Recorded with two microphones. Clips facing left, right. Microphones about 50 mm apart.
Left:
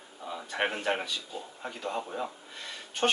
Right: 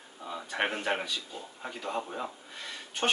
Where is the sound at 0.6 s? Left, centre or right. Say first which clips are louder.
Left 1 dB; centre.